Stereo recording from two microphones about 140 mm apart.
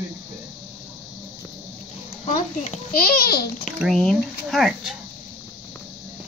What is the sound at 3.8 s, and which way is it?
Speech, centre (ahead or behind).